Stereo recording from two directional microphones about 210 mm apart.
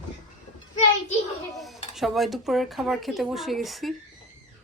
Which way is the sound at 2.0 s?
Centre (ahead or behind).